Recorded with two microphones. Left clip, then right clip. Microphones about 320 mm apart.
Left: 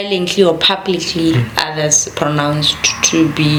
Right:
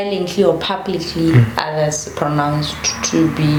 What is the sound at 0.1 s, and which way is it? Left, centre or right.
Speech, left.